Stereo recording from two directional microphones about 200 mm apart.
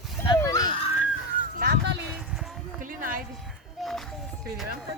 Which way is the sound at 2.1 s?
Centre (ahead or behind).